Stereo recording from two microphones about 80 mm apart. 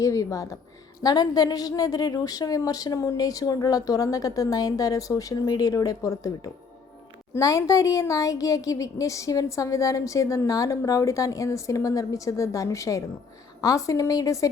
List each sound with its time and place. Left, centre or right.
0.0 s a woman's voice: left
1.0 s a woman's voice: left